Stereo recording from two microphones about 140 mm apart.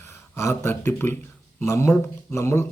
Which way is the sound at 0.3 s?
20° left (ahead or behind).